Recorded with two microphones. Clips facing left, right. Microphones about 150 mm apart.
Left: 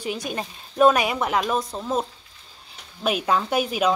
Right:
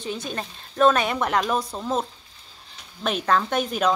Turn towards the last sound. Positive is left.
turn(degrees=5)  # may be behind; listen again after turning